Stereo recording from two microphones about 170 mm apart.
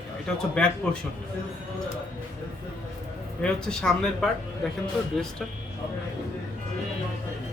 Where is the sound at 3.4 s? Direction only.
5° left (ahead or behind).